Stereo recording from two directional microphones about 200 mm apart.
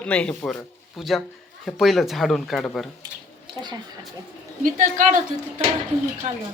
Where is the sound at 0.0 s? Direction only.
5° left (ahead or behind).